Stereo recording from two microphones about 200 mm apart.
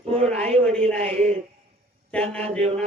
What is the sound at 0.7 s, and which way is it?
Speech, 5° left (ahead or behind).